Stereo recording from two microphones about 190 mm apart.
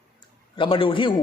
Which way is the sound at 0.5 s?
25° left (ahead or behind).